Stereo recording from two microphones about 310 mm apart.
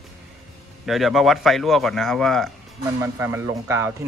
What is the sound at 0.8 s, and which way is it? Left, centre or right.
Speech, centre.